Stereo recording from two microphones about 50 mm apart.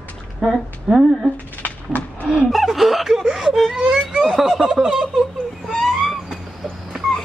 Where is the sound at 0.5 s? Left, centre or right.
Centre.